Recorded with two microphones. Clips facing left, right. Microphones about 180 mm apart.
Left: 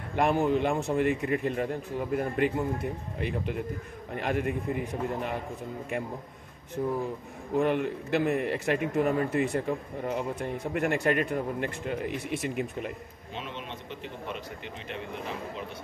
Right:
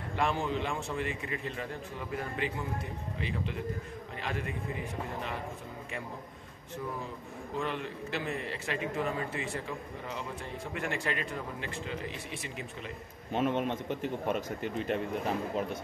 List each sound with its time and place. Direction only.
0.1 s a man's voice: 55° left (ahead or behind)
6.8 s a man's voice: 45° left (ahead or behind)
7.5 s a man's voice: 55° left (ahead or behind)
13.3 s a man's voice: 50° right (ahead or behind)